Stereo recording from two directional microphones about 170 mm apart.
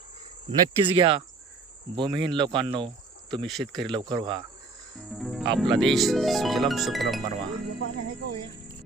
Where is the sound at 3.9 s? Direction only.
25° right (ahead or behind).